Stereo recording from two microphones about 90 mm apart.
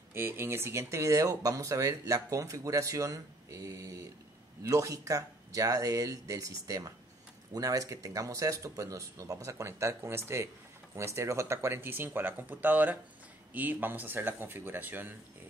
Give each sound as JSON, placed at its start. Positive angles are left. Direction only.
{"t": 0.1, "sound": "speech", "side_deg": -25}